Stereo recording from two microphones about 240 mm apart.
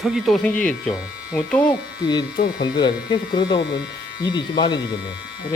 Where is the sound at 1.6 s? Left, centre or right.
Centre.